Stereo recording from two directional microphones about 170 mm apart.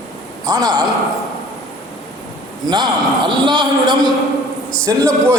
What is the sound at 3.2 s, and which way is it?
A man's voice, 25° right (ahead or behind).